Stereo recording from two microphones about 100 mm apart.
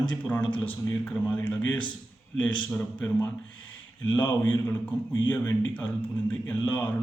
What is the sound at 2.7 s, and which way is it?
Mantra, 10° left (ahead or behind).